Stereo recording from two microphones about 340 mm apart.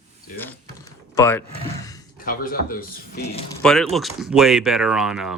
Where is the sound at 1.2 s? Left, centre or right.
Centre.